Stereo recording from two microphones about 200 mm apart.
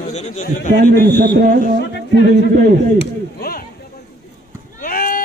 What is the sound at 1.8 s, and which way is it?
Speech, 55° left (ahead or behind).